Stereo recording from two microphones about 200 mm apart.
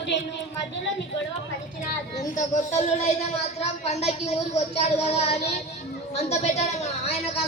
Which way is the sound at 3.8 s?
35° left (ahead or behind).